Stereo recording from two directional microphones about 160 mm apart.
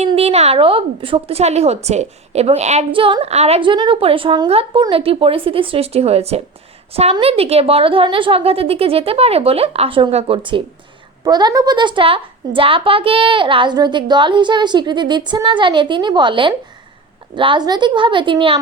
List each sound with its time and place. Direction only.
0.2 s a woman's voice: 40° right (ahead or behind)